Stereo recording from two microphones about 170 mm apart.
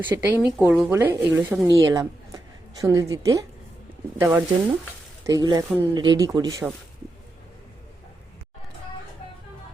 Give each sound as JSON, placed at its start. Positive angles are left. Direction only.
{"t": 0.1, "sound": "a woman's voice", "side_deg": -10}